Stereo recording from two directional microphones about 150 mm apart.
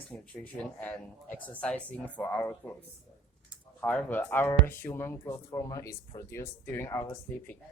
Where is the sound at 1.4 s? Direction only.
10° left (ahead or behind).